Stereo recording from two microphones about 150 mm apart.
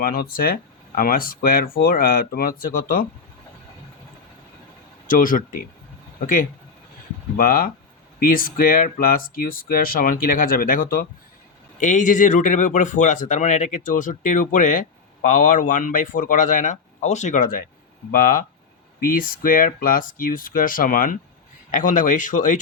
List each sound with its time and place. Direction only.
0.0 s speech: 75° left (ahead or behind)
5.0 s speech: 65° left (ahead or behind)
11.8 s speech: 55° left (ahead or behind)